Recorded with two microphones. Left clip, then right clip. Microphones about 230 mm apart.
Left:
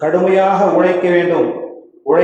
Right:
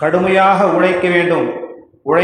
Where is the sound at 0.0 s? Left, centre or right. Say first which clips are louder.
Right 1 dB; right.